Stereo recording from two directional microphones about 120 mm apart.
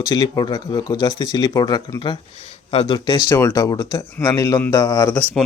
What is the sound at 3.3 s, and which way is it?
Speech, 20° left (ahead or behind).